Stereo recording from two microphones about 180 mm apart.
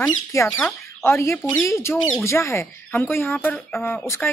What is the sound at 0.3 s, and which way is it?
Speech, 15° left (ahead or behind).